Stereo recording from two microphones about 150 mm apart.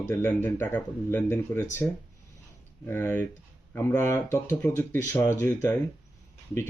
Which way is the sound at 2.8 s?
15° left (ahead or behind).